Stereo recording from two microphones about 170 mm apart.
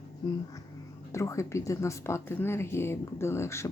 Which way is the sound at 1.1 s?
15° left (ahead or behind).